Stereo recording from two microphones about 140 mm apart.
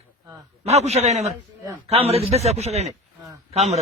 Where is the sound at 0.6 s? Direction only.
50° right (ahead or behind).